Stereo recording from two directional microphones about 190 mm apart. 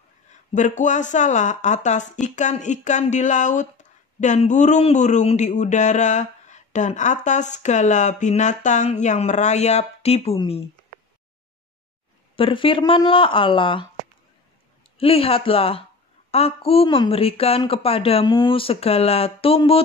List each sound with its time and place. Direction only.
0.6 s speech: 40° left (ahead or behind)
12.4 s a woman's voice: 30° left (ahead or behind)
15.0 s a woman's voice: 30° left (ahead or behind)